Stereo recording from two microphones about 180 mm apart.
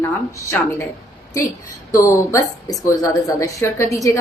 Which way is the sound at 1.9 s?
15° left (ahead or behind).